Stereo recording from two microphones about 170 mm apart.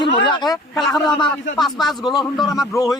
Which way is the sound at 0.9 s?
25° left (ahead or behind).